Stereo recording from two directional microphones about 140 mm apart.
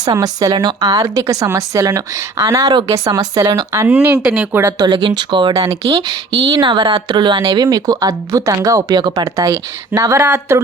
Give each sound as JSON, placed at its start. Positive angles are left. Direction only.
{"t": 0.0, "sound": "speech", "side_deg": -25}
{"t": 3.7, "sound": "speech", "side_deg": -15}
{"t": 4.2, "sound": "speech", "side_deg": -5}
{"t": 4.8, "sound": "speech", "side_deg": -35}